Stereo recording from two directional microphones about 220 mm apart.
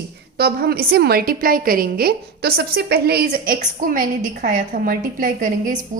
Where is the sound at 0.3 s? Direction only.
45° right (ahead or behind).